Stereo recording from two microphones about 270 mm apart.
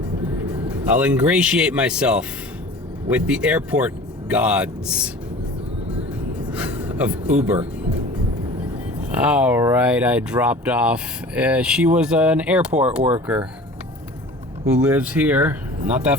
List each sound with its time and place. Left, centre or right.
0.4 s speech: centre
6.5 s a sound: centre
9.2 s speech: centre
14.8 s speech: centre